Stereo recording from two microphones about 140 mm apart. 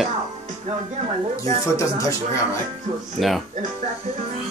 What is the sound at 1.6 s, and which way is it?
Speech, 20° left (ahead or behind).